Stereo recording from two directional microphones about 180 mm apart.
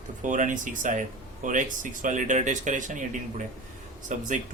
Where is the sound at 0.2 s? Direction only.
45° right (ahead or behind).